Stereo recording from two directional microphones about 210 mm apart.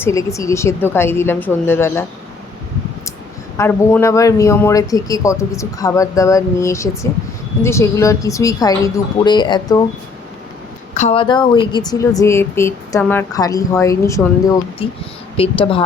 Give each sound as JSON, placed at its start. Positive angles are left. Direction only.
{"t": 0.0, "sound": "a woman's voice", "side_deg": 15}
{"t": 3.6, "sound": "a woman's voice", "side_deg": 10}
{"t": 10.9, "sound": "a woman's voice", "side_deg": 30}